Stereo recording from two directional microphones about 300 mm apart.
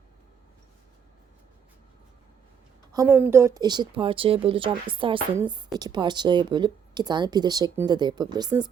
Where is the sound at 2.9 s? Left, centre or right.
Centre.